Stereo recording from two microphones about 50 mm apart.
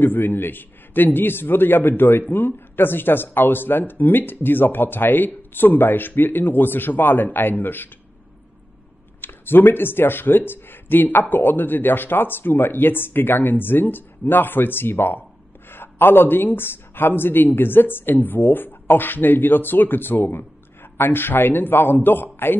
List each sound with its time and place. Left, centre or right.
0.0 s a man's voice: left
9.2 s a man's voice: left